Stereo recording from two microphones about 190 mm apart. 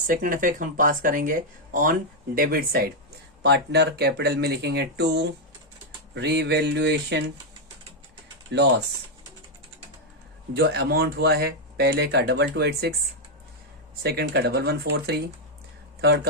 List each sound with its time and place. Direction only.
0.1 s speech: 45° right (ahead or behind); by 7.2 s 65° right (ahead or behind)
8.5 s speech: 65° right (ahead or behind)
10.5 s speech: 60° right (ahead or behind)
14.0 s speech: 60° right (ahead or behind)